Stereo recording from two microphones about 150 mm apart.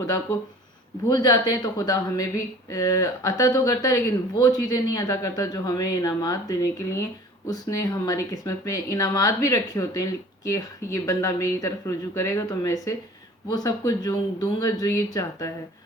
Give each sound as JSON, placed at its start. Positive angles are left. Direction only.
{"t": 1.1, "sound": "speech", "side_deg": 25}